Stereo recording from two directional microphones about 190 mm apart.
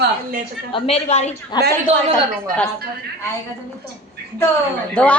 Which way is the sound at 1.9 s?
35° right (ahead or behind).